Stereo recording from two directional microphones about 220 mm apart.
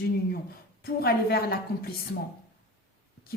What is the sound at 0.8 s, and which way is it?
A woman's voice, 45° left (ahead or behind).